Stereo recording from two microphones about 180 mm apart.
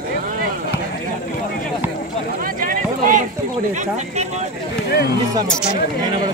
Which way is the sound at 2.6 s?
45° right (ahead or behind).